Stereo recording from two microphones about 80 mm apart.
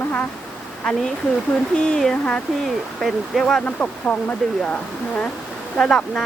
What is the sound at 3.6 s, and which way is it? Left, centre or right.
Speech, centre.